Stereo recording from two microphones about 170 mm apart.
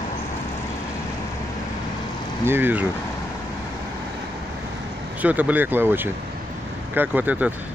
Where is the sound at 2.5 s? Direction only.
10° right (ahead or behind).